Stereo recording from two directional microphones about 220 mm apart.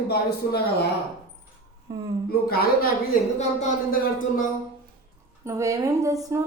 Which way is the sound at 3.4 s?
35° left (ahead or behind).